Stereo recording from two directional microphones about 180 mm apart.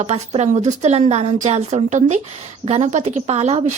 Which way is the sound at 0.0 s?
40° right (ahead or behind).